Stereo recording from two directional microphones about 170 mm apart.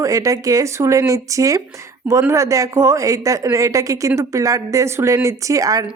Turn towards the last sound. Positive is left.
turn(degrees=-20)  # may be behind; listen again after turning